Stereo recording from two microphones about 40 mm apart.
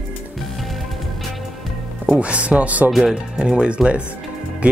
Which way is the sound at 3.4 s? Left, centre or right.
Right.